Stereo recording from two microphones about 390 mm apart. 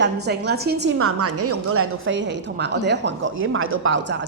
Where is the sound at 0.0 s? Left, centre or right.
Right.